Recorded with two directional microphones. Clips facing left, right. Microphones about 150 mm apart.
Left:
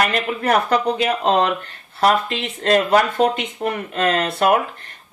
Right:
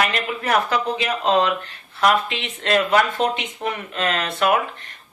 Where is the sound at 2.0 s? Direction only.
40° left (ahead or behind).